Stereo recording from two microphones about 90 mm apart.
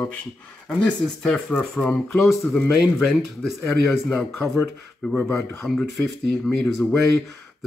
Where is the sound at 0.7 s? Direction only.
10° left (ahead or behind).